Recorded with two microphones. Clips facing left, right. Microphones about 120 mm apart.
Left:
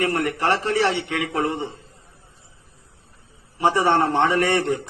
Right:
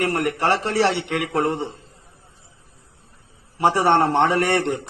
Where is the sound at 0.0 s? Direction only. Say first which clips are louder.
Right 1 dB; 30° right (ahead or behind).